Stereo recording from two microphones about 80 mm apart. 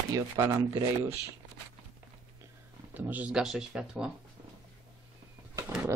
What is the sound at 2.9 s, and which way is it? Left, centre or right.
Speech, right.